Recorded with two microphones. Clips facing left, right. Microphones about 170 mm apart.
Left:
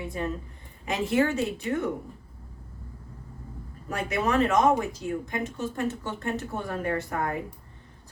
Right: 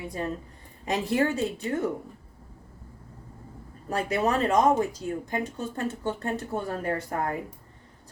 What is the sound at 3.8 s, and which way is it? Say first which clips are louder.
Speech: right 2 dB; 35° right (ahead or behind).